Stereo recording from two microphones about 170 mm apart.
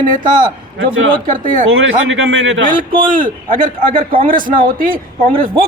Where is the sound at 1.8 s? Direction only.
90° right.